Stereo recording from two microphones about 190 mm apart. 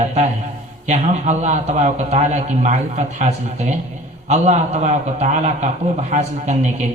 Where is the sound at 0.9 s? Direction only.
40° right (ahead or behind).